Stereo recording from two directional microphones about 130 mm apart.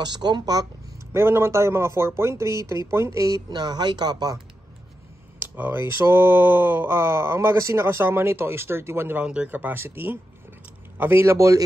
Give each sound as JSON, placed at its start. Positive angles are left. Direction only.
{"t": 0.0, "sound": "speech", "side_deg": -35}
{"t": 1.1, "sound": "speech", "side_deg": -20}
{"t": 5.4, "sound": "speech", "side_deg": -15}